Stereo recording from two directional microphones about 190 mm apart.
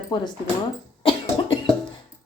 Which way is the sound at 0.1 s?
25° left (ahead or behind).